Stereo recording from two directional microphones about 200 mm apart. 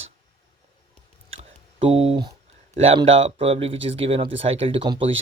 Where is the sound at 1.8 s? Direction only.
30° right (ahead or behind).